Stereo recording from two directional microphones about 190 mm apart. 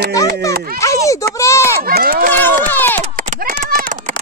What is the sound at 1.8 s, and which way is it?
Run, 50° right (ahead or behind).